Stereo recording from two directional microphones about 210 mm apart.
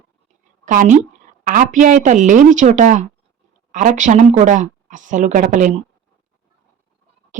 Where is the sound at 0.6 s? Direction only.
40° right (ahead or behind).